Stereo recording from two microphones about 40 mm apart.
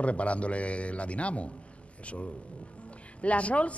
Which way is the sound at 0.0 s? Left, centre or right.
Left.